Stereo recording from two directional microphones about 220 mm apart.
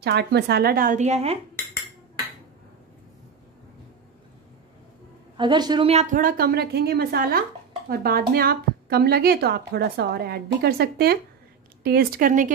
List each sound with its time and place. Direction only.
0.0 s a woman's voice: 50° right (ahead or behind); by 1.4 s 30° right (ahead or behind)
5.4 s a woman's voice: 20° right (ahead or behind); by 12.5 s 35° right (ahead or behind)